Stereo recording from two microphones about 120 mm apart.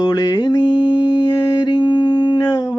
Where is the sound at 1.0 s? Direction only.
35° left (ahead or behind).